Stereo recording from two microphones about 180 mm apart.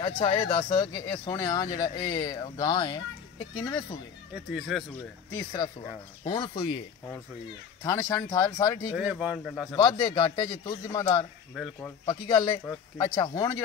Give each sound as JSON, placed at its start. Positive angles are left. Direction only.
{"t": 0.0, "sound": "speech", "side_deg": 30}
{"t": 4.5, "sound": "speech", "side_deg": 0}
{"t": 5.3, "sound": "speech", "side_deg": 20}
{"t": 7.8, "sound": "speech", "side_deg": 15}
{"t": 8.9, "sound": "speech", "side_deg": -5}
{"t": 9.8, "sound": "speech", "side_deg": 25}
{"t": 11.5, "sound": "speech", "side_deg": 0}
{"t": 12.1, "sound": "speech", "side_deg": 25}